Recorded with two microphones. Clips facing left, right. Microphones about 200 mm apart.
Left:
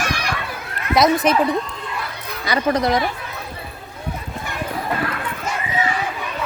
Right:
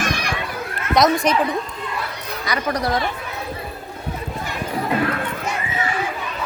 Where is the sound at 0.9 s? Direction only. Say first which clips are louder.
Left 1 dB; 5° left (ahead or behind).